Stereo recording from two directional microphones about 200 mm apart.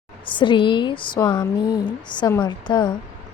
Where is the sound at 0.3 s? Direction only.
25° left (ahead or behind).